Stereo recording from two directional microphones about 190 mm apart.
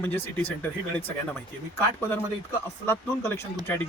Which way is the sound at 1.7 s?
15° left (ahead or behind).